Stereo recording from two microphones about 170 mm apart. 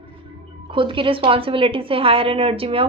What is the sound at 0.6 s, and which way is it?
A woman's voice, 30° right (ahead or behind).